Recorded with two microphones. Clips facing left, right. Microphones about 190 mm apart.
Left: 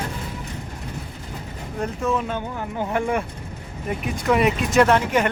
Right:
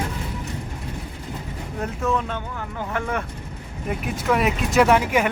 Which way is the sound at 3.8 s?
Centre (ahead or behind).